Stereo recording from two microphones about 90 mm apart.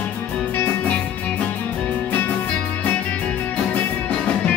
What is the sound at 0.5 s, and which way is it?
Music, 20° left (ahead or behind).